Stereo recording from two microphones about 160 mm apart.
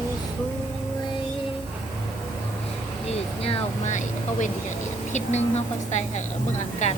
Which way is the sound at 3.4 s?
45° left (ahead or behind).